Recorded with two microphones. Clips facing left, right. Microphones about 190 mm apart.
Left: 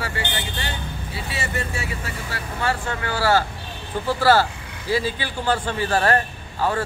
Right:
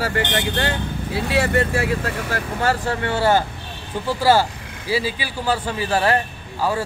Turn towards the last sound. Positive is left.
turn(degrees=-10)  # may be behind; listen again after turning